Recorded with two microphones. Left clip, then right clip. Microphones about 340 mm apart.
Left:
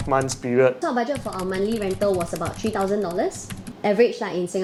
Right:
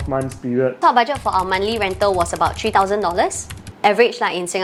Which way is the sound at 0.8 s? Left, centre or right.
Right.